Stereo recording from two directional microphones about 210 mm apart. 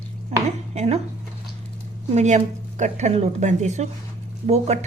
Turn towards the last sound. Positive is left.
turn(degrees=-30)  # may be behind; listen again after turning